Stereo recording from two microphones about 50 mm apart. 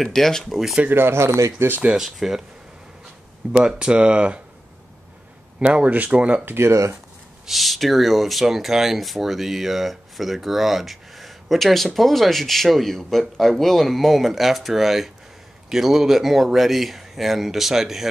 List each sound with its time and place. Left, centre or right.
0.0 s speech: centre
0.8 s speech: right
1.1 s speech: right
2.0 s speech: centre
3.5 s speech: centre
5.6 s speech: right
6.4 s speech: right
7.4 s speech: centre